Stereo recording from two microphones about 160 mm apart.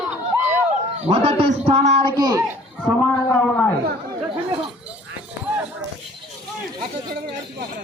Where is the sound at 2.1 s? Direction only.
25° right (ahead or behind).